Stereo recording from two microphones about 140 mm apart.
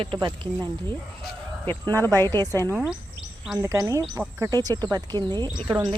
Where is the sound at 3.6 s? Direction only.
20° right (ahead or behind).